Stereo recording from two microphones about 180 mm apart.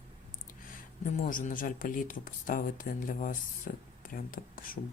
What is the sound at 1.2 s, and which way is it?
Speech, 45° left (ahead or behind).